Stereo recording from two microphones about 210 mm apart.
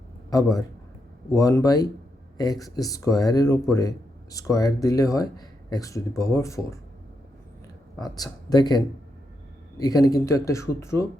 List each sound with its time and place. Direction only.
0.3 s a man's voice: 15° left (ahead or behind)
8.0 s a man's voice: 20° left (ahead or behind)